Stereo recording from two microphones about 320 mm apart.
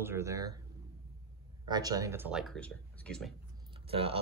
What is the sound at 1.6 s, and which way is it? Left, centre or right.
Speech, centre.